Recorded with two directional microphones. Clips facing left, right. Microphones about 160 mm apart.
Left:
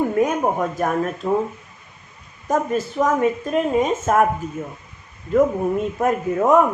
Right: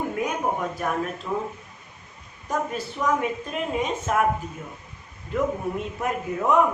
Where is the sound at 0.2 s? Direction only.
45° left (ahead or behind).